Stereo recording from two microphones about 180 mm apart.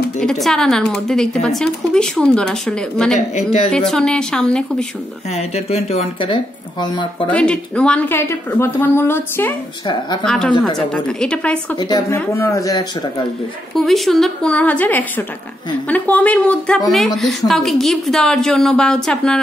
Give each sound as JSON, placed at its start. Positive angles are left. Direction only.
{"t": 0.2, "sound": "a woman's voice", "side_deg": 0}
{"t": 5.3, "sound": "speech", "side_deg": 35}
{"t": 7.2, "sound": "a woman's voice", "side_deg": 5}
{"t": 11.8, "sound": "a woman's voice", "side_deg": 20}
{"t": 13.7, "sound": "a woman's voice", "side_deg": 0}